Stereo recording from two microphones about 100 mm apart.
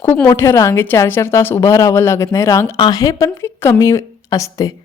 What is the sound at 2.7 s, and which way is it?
Speech, 45° left (ahead or behind).